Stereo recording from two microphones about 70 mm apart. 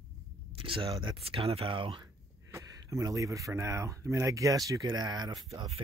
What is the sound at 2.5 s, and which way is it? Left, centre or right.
Speech, right.